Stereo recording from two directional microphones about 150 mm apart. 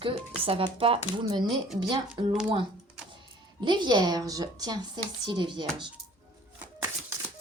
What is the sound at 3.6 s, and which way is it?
A woman's voice, 30° right (ahead or behind).